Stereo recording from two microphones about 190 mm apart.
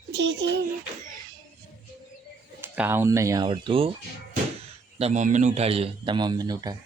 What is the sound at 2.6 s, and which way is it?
Speech, 10° right (ahead or behind).